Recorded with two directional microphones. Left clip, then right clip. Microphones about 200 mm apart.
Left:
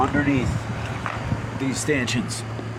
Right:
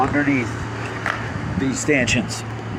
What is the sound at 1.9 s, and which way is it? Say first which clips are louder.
Speech: right 5 dB; 35° left (ahead or behind).